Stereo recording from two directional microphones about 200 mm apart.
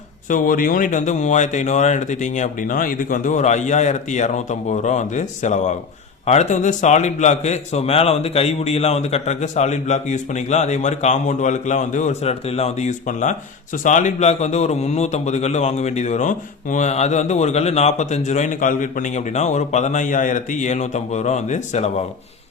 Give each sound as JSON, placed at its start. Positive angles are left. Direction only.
{"t": 0.3, "sound": "a man's voice", "side_deg": 45}